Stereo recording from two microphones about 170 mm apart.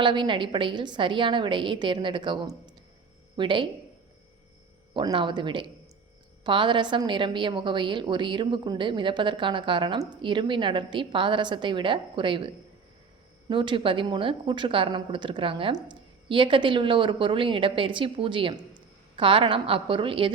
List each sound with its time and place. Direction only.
0.0 s a woman's voice: 30° right (ahead or behind)
4.9 s a woman's voice: 30° right (ahead or behind)
13.5 s a woman's voice: 30° right (ahead or behind)